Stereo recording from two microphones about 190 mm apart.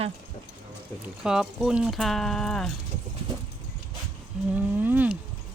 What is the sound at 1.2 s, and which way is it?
Speech, 5° right (ahead or behind).